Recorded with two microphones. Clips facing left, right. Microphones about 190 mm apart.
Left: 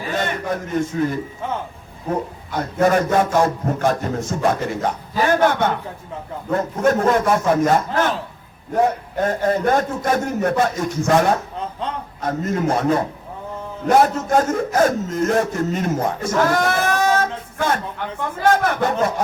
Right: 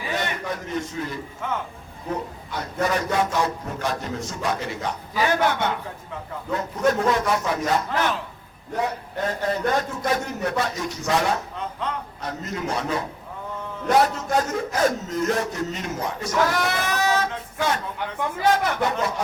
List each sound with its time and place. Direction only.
0.0 s a man's voice: 50° left (ahead or behind)
1.4 s speech: 30° left (ahead or behind)
2.0 s a man's voice: 50° left (ahead or behind)